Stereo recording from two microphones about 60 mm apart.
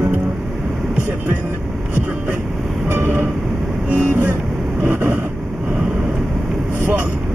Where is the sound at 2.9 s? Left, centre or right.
Right.